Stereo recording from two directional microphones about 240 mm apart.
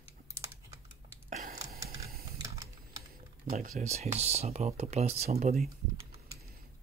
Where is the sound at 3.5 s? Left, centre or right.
Right.